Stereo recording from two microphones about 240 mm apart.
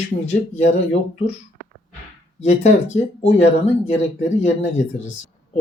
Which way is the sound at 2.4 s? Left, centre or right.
Left.